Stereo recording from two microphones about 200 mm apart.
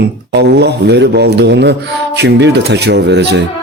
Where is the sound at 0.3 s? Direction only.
55° right (ahead or behind).